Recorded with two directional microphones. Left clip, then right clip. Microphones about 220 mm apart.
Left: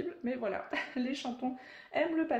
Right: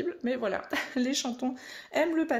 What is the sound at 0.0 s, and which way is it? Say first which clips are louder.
Speech: right 5 dB; 40° right (ahead or behind).